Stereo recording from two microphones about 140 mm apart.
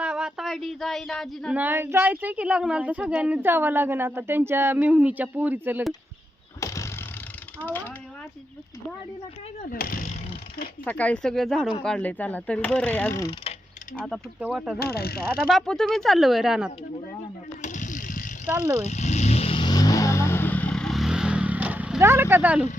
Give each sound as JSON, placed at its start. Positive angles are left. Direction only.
{"t": 0.0, "sound": "a sound", "side_deg": -5}
{"t": 1.5, "sound": "speech", "side_deg": -15}
{"t": 6.6, "sound": "vehicle", "side_deg": 20}
{"t": 9.6, "sound": "speech", "side_deg": 90}
{"t": 10.8, "sound": "speech", "side_deg": 10}
{"t": 14.5, "sound": "speech", "side_deg": -5}
{"t": 17.6, "sound": "a sound", "side_deg": 65}
{"t": 18.5, "sound": "speech", "side_deg": -15}
{"t": 18.9, "sound": "vehicle", "side_deg": 55}
{"t": 22.0, "sound": "speech", "side_deg": -15}